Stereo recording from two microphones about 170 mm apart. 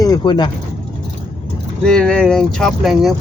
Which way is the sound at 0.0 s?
25° left (ahead or behind).